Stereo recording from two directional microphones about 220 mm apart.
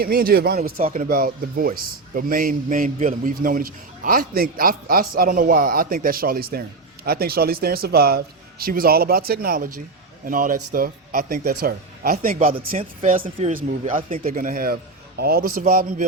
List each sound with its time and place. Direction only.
0.0 s speech: 40° right (ahead or behind)